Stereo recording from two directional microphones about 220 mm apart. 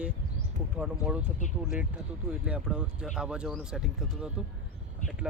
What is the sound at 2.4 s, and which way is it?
Speech, 5° right (ahead or behind).